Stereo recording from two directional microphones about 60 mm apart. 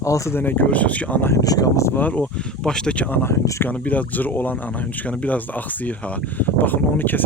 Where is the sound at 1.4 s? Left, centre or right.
Left.